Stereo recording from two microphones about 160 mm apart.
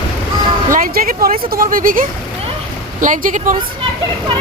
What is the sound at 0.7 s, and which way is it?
A woman's voice, 65° right (ahead or behind).